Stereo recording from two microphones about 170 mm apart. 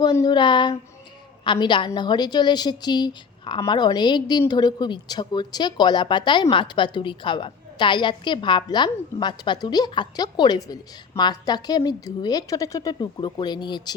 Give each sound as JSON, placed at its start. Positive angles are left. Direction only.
{"t": 0.0, "sound": "a woman's voice", "side_deg": 25}